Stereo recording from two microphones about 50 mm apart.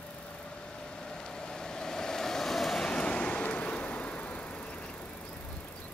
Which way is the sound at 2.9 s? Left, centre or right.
Left.